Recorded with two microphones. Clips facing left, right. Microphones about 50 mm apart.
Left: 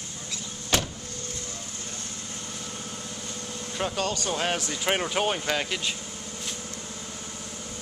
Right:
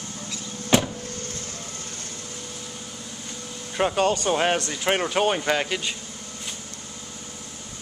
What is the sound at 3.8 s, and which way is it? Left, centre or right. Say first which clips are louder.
Speech: right 7 dB; right.